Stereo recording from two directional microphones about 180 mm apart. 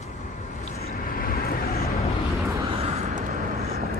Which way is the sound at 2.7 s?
35° right (ahead or behind).